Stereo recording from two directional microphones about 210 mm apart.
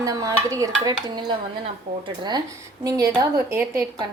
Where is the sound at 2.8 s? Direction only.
15° right (ahead or behind).